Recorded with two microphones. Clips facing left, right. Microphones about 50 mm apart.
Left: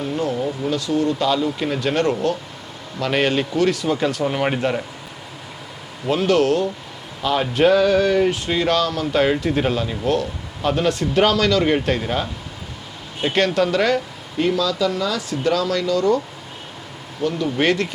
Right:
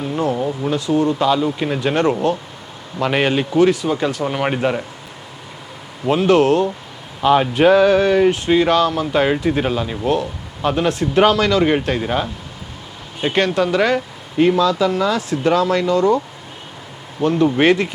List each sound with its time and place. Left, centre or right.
0.3 s speech: centre
6.1 s speech: right
11.8 s speech: centre
14.3 s speech: right
17.2 s speech: right